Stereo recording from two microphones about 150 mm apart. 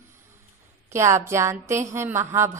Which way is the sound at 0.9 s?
20° right (ahead or behind).